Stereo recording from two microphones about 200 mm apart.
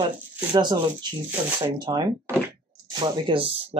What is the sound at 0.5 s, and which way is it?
Speech, 20° right (ahead or behind).